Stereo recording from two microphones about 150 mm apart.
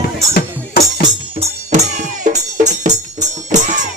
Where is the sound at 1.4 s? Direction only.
50° right (ahead or behind).